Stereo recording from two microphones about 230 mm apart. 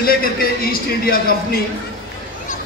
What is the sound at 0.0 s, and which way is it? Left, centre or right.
A man's voice, left.